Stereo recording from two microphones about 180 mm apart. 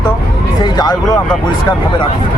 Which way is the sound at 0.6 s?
25° left (ahead or behind).